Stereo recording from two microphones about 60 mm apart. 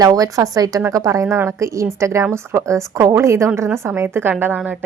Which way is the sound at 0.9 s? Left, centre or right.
Right.